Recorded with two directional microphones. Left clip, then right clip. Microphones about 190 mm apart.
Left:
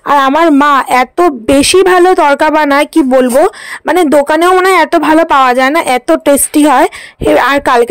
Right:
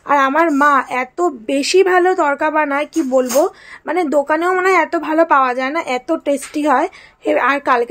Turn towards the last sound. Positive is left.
turn(degrees=50)  # may be behind; listen again after turning